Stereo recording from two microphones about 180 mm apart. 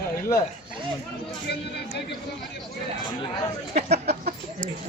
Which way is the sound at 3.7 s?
40° right (ahead or behind).